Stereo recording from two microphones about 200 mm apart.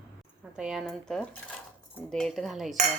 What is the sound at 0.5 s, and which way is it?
A woman's voice, centre (ahead or behind).